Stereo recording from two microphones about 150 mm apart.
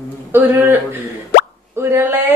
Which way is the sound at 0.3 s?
15° right (ahead or behind).